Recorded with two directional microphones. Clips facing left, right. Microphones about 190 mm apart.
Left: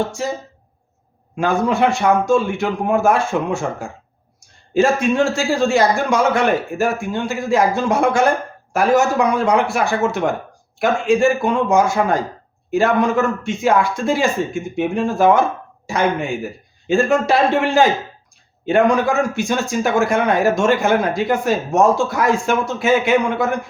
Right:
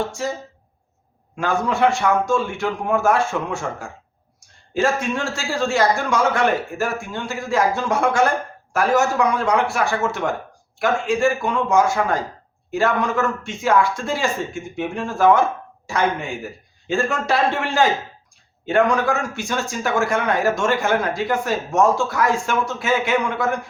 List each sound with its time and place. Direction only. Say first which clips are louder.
1.4 s a man's voice: left 3 dB; 15° left (ahead or behind)